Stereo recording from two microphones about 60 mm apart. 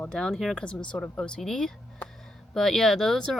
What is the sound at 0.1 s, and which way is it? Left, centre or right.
Speech, centre.